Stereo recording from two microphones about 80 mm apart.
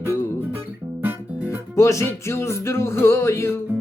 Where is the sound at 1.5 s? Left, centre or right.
Left.